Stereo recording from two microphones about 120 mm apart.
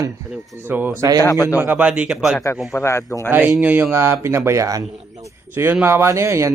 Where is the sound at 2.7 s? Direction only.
25° left (ahead or behind).